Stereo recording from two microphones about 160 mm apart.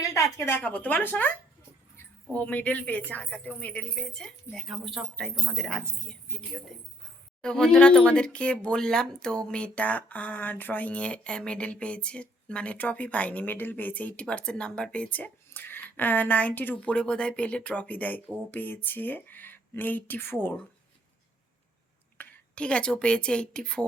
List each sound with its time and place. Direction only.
0.0 s a sound: 20° left (ahead or behind)
0.3 s speech: 15° left (ahead or behind)
2.3 s a woman's voice: 10° left (ahead or behind)
22.2 s a woman's voice: 10° left (ahead or behind)